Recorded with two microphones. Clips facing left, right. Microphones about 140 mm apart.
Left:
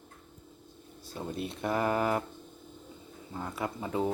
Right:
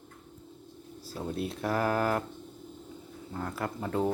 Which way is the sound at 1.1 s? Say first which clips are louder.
Right 2 dB; centre (ahead or behind).